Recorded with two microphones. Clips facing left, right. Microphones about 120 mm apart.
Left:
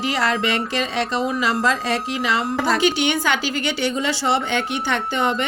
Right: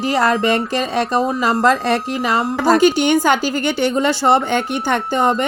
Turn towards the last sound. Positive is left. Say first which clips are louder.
# right 5 dB
turn(degrees=-45)  # may be behind; listen again after turning